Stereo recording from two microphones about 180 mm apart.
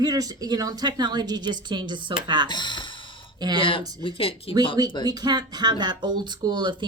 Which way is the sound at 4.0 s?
30° left (ahead or behind).